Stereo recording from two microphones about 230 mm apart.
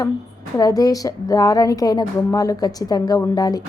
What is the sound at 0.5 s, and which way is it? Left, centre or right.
A woman's voice, centre.